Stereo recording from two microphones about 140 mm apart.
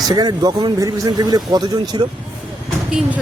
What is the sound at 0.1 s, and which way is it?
Speech, 30° right (ahead or behind).